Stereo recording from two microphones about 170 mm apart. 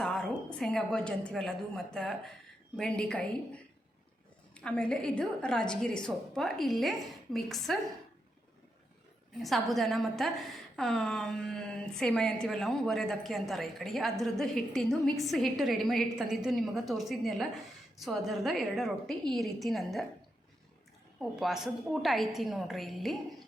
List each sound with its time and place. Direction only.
0.0 s a woman's voice: 5° left (ahead or behind)
9.4 s a woman's voice: centre (ahead or behind)
21.2 s a woman's voice: centre (ahead or behind)